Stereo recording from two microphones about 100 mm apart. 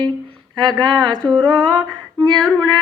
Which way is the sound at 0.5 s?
45° right (ahead or behind).